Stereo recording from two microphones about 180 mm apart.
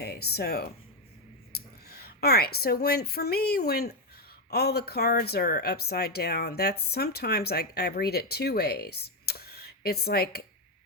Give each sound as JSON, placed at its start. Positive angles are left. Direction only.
{"t": 0.0, "sound": "a woman's voice", "side_deg": 60}